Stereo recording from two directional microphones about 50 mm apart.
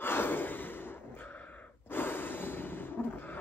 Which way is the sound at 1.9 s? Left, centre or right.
Left.